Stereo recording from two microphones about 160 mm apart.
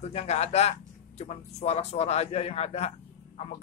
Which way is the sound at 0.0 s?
45° left (ahead or behind).